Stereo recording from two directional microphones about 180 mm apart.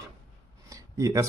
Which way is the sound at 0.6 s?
20° right (ahead or behind).